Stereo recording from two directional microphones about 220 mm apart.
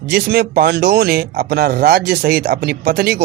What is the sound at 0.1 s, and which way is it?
Speech, 45° right (ahead or behind).